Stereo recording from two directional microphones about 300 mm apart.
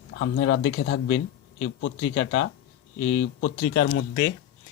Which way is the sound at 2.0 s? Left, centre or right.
Left.